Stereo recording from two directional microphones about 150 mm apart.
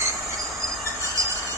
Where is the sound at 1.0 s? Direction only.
20° right (ahead or behind).